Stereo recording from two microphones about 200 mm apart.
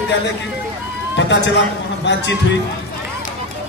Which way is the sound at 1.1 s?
60° left (ahead or behind).